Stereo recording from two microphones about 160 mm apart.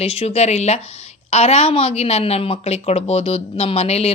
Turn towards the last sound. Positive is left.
turn(degrees=40)  # may be behind; listen again after turning